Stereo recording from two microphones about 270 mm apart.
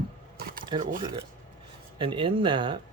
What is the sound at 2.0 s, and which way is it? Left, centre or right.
Speech, centre.